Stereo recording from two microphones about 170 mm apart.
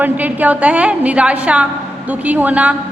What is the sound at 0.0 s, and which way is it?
A woman's voice, 10° right (ahead or behind).